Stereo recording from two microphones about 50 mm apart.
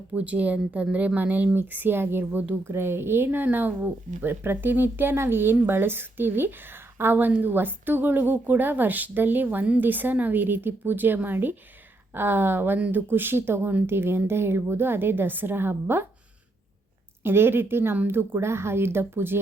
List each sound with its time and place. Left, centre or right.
0.1 s a woman's voice: right
3.2 s a woman's voice: right
17.2 s speech: right